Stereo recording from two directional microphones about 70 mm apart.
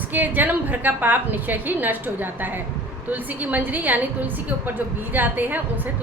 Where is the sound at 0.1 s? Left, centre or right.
Right.